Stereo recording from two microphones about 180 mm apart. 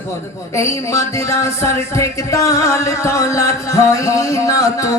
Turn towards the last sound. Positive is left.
turn(degrees=20)  # may be behind; listen again after turning